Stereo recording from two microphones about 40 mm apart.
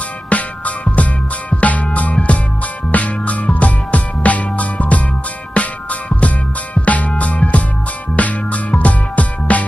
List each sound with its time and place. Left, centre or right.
0.3 s music: left